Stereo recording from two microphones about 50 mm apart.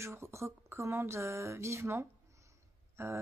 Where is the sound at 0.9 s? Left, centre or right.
Right.